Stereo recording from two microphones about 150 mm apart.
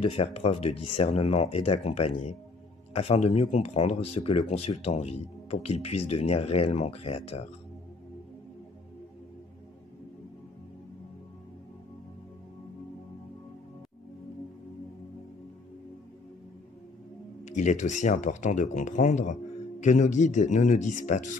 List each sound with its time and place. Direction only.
0.0 s speech: 40° left (ahead or behind)
17.5 s speech: 50° left (ahead or behind)